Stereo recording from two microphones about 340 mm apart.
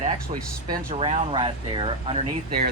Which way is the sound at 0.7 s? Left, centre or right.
Centre.